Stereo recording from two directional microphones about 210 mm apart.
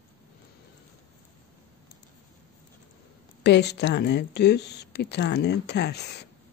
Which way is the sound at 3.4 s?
55° left (ahead or behind).